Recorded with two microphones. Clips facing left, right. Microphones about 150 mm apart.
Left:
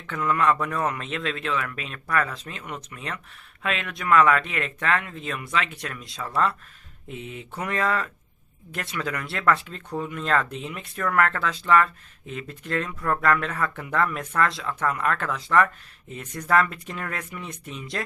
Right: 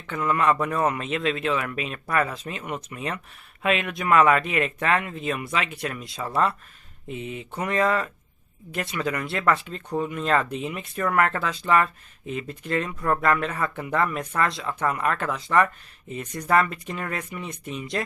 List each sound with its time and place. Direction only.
0.1 s a man's voice: 5° right (ahead or behind)
7.1 s a man's voice: centre (ahead or behind)